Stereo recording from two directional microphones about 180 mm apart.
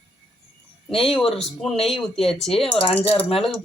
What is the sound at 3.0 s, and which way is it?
Speech, 30° left (ahead or behind).